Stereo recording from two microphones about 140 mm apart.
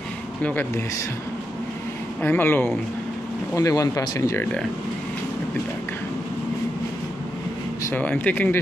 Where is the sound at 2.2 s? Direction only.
15° left (ahead or behind).